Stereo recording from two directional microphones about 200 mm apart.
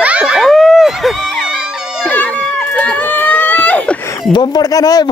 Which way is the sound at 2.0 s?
10° left (ahead or behind).